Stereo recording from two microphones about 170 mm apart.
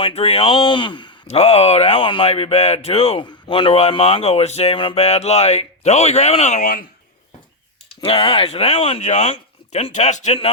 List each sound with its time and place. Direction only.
0.0 s speech: 35° left (ahead or behind)
8.0 s speech: 30° left (ahead or behind)